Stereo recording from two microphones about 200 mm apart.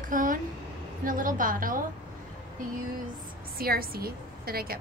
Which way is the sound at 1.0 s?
45° right (ahead or behind).